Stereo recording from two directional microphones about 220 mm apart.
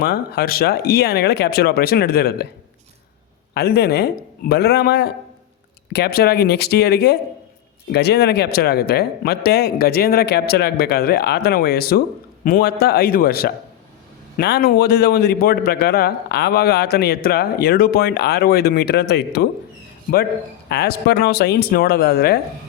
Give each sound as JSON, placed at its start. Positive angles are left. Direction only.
{"t": 0.0, "sound": "a man's voice", "side_deg": 45}
{"t": 3.5, "sound": "a man's voice", "side_deg": 45}
{"t": 20.7, "sound": "a man's voice", "side_deg": 45}